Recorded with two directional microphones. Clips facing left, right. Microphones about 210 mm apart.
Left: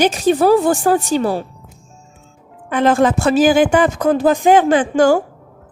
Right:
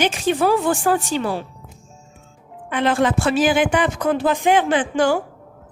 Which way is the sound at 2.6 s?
45° left (ahead or behind).